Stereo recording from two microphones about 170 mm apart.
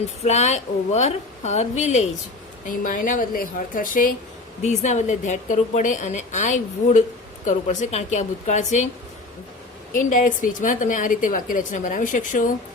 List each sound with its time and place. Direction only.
0.2 s a woman's voice: 40° left (ahead or behind)
2.6 s a woman's voice: 55° left (ahead or behind)
4.6 s a woman's voice: 45° left (ahead or behind)
9.9 s a woman's voice: 50° left (ahead or behind)